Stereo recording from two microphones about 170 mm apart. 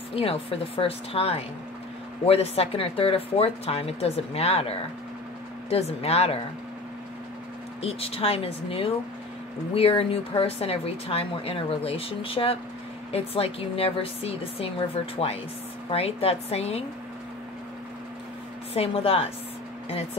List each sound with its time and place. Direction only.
0.1 s speech: 35° left (ahead or behind)
7.8 s speech: 35° left (ahead or behind)
15.9 s speech: 35° left (ahead or behind)
18.7 s speech: 35° left (ahead or behind)